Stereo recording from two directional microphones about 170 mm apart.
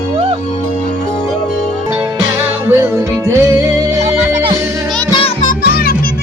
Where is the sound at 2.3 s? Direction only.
15° right (ahead or behind).